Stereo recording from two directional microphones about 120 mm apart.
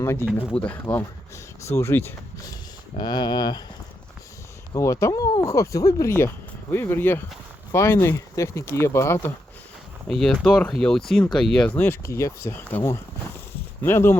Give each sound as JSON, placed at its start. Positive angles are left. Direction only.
{"t": 0.0, "sound": "speech", "side_deg": 20}
{"t": 0.3, "sound": "speech", "side_deg": 10}
{"t": 3.0, "sound": "speech", "side_deg": 35}
{"t": 4.7, "sound": "speech", "side_deg": 25}
{"t": 10.1, "sound": "speech", "side_deg": 0}